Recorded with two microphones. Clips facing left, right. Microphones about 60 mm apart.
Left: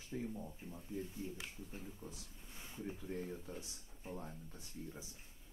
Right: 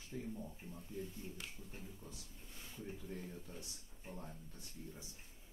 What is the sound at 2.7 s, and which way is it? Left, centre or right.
Speech, left.